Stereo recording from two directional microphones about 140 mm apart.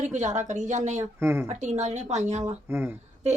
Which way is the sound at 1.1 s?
15° right (ahead or behind).